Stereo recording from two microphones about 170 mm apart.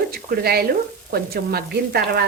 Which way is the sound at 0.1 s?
65° right (ahead or behind).